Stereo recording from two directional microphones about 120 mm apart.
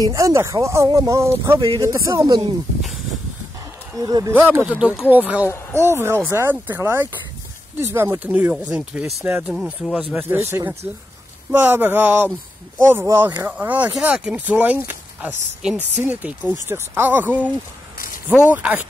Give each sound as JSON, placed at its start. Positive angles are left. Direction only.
{"t": 0.0, "sound": "speech", "side_deg": -25}
{"t": 3.9, "sound": "speech", "side_deg": -30}
{"t": 4.3, "sound": "speech", "side_deg": -15}
{"t": 10.1, "sound": "speech", "side_deg": -15}
{"t": 18.5, "sound": "speech", "side_deg": -15}